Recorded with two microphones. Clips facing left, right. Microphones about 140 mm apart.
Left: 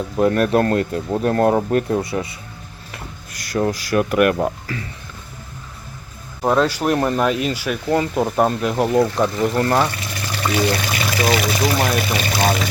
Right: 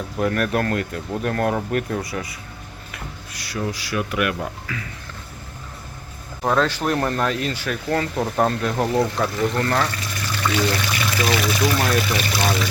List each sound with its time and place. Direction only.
0.2 s speech: 25° left (ahead or behind)
3.3 s speech: 45° left (ahead or behind)
6.4 s speech: 10° left (ahead or behind)